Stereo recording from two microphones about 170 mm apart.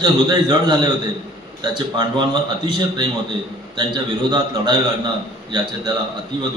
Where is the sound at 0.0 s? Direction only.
25° right (ahead or behind).